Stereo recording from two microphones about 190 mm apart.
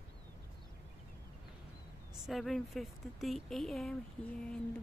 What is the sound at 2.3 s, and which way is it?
Speech, centre (ahead or behind).